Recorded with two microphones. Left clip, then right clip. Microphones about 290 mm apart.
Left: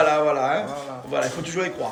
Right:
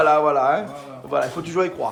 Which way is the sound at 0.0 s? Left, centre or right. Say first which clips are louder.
Right 3 dB; right.